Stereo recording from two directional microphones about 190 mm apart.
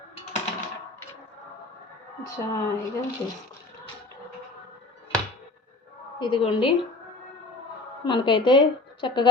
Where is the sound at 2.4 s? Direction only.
15° left (ahead or behind).